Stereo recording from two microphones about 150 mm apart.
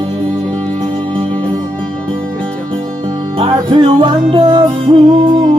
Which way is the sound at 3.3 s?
35° right (ahead or behind).